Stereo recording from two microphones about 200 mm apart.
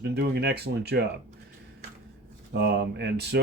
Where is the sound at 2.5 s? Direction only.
55° right (ahead or behind).